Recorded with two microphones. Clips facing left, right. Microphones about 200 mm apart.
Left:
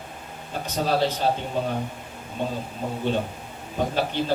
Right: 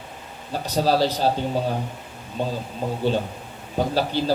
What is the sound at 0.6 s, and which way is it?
Speech, 35° right (ahead or behind).